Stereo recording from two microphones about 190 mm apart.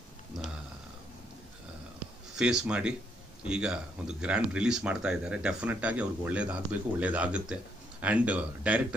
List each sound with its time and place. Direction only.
2.3 s speech: 5° right (ahead or behind)